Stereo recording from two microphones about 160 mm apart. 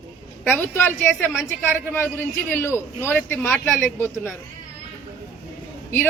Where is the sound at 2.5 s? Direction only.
15° left (ahead or behind).